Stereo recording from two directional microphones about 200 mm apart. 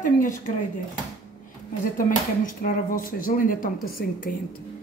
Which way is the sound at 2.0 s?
45° left (ahead or behind).